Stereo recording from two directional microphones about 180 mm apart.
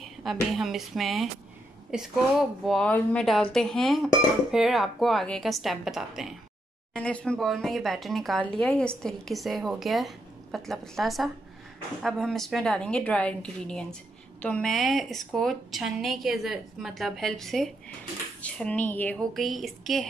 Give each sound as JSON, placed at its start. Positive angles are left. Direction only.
{"t": 0.0, "sound": "speech", "side_deg": 0}
{"t": 2.6, "sound": "speech", "side_deg": 5}